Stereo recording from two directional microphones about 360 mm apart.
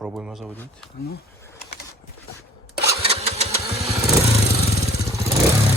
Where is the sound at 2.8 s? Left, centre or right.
Centre.